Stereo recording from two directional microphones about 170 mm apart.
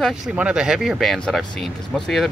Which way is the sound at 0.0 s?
5° right (ahead or behind).